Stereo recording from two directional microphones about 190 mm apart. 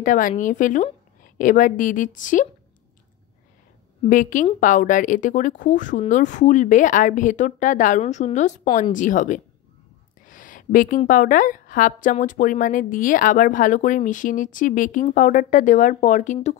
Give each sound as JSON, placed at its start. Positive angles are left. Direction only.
{"t": 0.0, "sound": "a woman's voice", "side_deg": 45}
{"t": 4.1, "sound": "speech", "side_deg": 45}
{"t": 10.2, "sound": "a sound", "side_deg": 45}
{"t": 11.1, "sound": "speech", "side_deg": 45}